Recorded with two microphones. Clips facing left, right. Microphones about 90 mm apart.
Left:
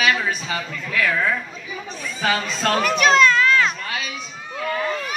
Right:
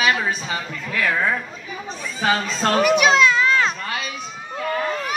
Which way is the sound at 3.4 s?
30° right (ahead or behind).